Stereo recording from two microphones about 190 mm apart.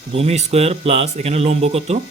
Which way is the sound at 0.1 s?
35° right (ahead or behind).